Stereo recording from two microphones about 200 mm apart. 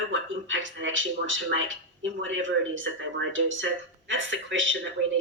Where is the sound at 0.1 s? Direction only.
70° right (ahead or behind).